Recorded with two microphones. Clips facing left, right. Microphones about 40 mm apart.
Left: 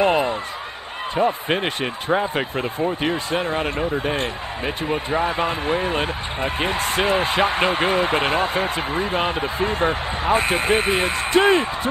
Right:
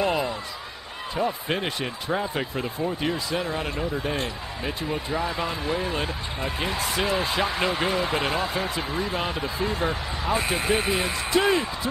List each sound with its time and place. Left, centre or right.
0.0 s speech: left